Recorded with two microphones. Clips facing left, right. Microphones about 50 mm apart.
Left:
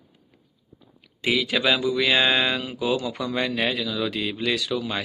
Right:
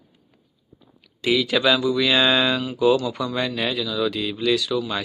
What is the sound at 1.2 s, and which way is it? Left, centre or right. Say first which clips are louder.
Speech: right 3 dB; centre.